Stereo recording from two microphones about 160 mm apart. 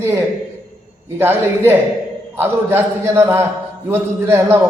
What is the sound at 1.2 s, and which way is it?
A man's voice, 15° right (ahead or behind).